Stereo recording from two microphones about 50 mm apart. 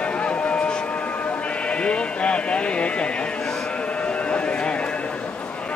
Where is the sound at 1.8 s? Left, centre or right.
Left.